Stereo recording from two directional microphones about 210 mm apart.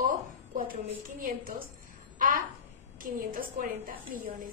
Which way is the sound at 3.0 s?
40° right (ahead or behind).